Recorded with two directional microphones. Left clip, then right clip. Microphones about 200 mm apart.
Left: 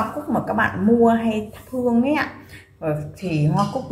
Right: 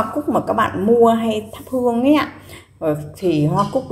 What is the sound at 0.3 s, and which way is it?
A woman's voice, 30° right (ahead or behind).